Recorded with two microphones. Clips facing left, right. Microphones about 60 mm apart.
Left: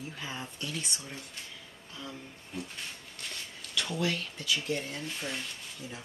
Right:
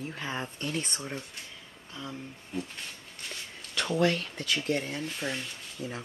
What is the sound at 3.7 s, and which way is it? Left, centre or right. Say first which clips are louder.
Speech: right 5 dB; right.